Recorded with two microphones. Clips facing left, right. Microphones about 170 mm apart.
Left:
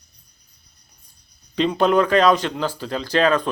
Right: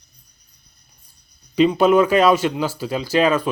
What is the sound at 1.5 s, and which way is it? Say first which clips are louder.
Speech: right 3 dB; 5° right (ahead or behind).